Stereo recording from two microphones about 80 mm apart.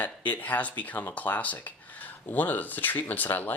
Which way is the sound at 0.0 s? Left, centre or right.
Centre.